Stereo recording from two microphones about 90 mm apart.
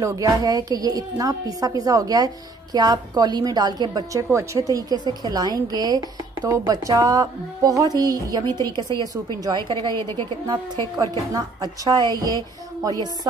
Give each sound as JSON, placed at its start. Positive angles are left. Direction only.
{"t": 0.0, "sound": "a woman's voice", "side_deg": -40}